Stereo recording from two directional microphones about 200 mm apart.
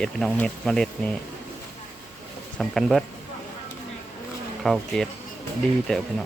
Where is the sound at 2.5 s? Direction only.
Centre (ahead or behind).